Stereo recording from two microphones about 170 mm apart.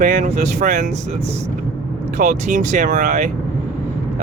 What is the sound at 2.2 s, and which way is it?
Speech, 50° right (ahead or behind).